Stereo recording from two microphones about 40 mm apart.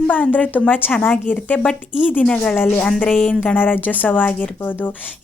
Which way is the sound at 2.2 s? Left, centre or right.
Left.